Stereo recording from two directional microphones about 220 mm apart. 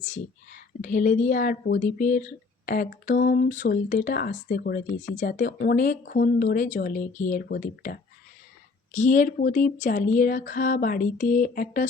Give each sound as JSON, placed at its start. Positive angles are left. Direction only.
{"t": 0.8, "sound": "speech", "side_deg": 35}